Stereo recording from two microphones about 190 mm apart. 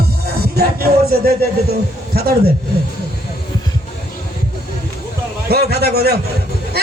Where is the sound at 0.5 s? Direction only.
55° right (ahead or behind).